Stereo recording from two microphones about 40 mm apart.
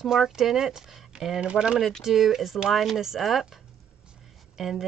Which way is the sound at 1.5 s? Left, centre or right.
Right.